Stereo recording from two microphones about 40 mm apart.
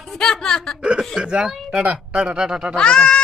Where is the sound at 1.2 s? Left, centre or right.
Right.